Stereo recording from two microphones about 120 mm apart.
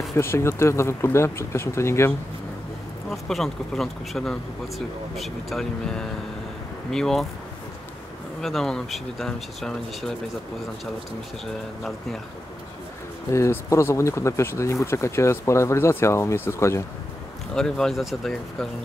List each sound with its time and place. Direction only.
0.1 s speech: 20° left (ahead or behind)
3.1 s speech: centre (ahead or behind)
8.4 s speech: 5° left (ahead or behind)
13.3 s speech: 25° left (ahead or behind)
17.6 s speech: 5° left (ahead or behind)